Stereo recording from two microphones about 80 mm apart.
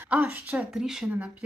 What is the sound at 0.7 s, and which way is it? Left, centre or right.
Speech, centre.